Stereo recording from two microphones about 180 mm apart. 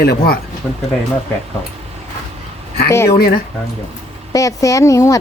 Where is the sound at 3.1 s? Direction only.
60° left (ahead or behind).